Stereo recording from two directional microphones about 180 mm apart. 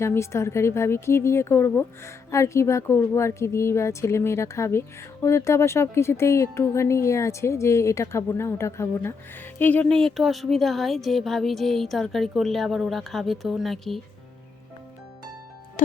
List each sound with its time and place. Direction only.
0.0 s speech: 15° left (ahead or behind)